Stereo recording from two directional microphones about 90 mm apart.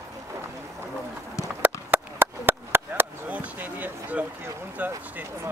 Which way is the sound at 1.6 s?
20° right (ahead or behind).